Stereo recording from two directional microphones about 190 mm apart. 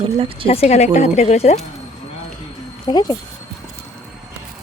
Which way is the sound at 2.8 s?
20° left (ahead or behind).